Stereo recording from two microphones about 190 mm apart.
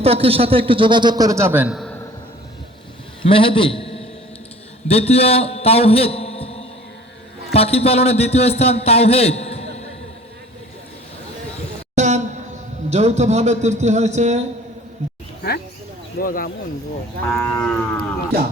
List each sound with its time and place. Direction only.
0.0 s a man's voice: 30° right (ahead or behind); by 1.9 s 5° right (ahead or behind)
3.2 s a man's voice: 30° left (ahead or behind)
11.9 s a sound: 40° right (ahead or behind)
12.9 s a man's voice: 35° right (ahead or behind)
16.2 s speech: 50° left (ahead or behind)
17.2 s cattle: centre (ahead or behind)